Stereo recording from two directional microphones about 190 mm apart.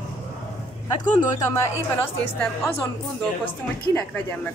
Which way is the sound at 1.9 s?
10° left (ahead or behind).